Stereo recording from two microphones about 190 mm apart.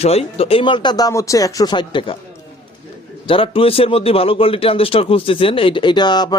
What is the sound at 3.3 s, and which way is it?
A man's voice, 30° left (ahead or behind).